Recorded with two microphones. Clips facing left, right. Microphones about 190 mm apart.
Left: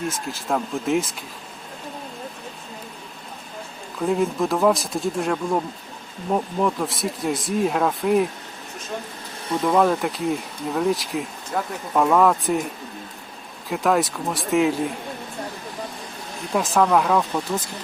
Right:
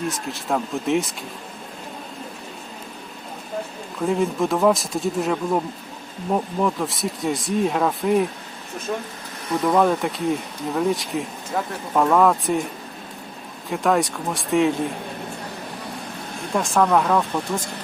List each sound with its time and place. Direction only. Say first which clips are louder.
0.1 s speech: right 1 dB; centre (ahead or behind)
4.0 s speech: even; centre (ahead or behind)
8.9 s speech: right 5 dB; 55° right (ahead or behind)
9.6 s speech: even; centre (ahead or behind)
13.7 s speech: even; centre (ahead or behind)
16.6 s speech: even; centre (ahead or behind)